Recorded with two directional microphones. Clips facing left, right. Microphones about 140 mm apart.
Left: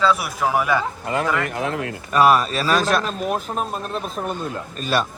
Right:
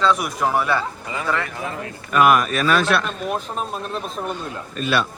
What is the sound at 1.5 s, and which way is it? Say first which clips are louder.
Speech: left 5 dB; 65° left (ahead or behind).